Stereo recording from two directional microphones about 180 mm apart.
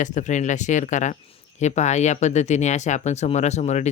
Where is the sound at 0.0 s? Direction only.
45° left (ahead or behind).